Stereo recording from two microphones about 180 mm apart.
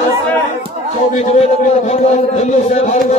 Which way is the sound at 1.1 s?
40° left (ahead or behind).